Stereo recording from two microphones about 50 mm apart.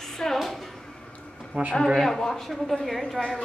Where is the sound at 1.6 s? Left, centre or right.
Right.